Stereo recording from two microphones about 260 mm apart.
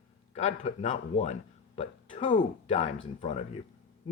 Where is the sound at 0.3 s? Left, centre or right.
Left.